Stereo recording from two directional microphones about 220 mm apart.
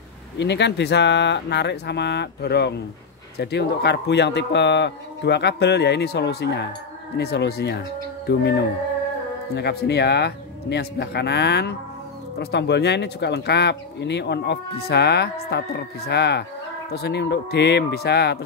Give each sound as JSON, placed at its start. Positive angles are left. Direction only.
{"t": 0.4, "sound": "speech", "side_deg": 50}